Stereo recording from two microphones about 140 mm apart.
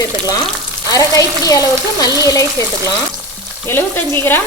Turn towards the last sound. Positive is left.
turn(degrees=15)  # may be behind; listen again after turning